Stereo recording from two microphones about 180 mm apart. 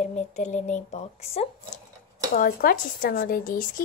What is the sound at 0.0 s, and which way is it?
A woman's voice, 40° left (ahead or behind).